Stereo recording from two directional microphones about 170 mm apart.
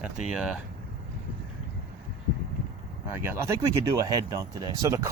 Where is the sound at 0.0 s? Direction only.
5° right (ahead or behind).